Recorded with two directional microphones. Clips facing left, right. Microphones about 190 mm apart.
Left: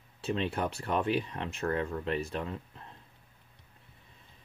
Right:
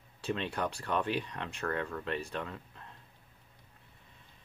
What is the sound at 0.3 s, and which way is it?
Speech, 25° left (ahead or behind).